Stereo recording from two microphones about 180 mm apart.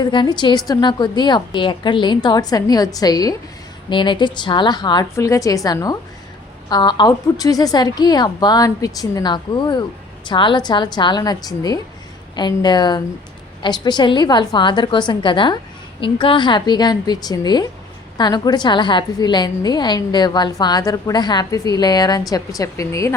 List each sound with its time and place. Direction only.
0.0 s a woman's voice: 25° left (ahead or behind)